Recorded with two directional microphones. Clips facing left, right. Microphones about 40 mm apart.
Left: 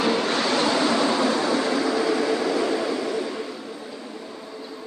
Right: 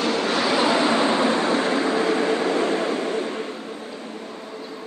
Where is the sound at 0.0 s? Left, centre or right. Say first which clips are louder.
Even; centre; by 4.6 s right.